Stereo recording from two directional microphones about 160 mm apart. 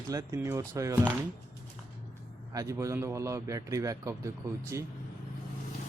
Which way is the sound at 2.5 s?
20° right (ahead or behind).